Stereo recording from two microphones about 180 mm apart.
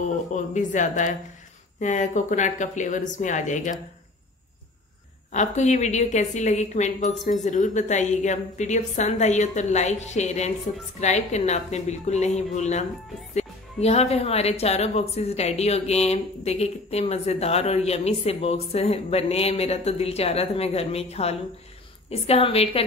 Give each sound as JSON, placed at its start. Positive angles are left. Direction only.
{"t": 0.3, "sound": "speech", "side_deg": 45}
{"t": 5.3, "sound": "speech", "side_deg": 40}